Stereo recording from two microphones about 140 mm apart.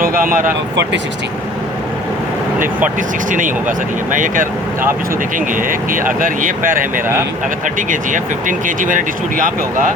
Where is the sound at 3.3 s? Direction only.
70° right (ahead or behind).